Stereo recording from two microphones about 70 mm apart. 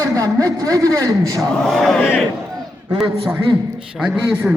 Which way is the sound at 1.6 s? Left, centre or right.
Centre.